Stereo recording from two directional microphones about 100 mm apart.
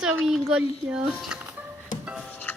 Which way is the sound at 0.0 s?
5° right (ahead or behind).